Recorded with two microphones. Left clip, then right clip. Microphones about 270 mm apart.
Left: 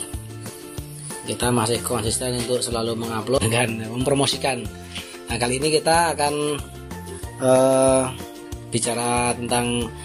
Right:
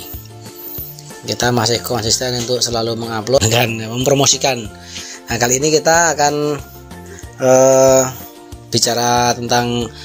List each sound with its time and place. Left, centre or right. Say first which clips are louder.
1.2 s speech: right 7 dB; right
5.5 s speech: right 6 dB; right
6.1 s music: right 7 dB; right